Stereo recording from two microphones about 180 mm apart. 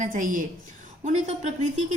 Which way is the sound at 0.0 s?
50° right (ahead or behind).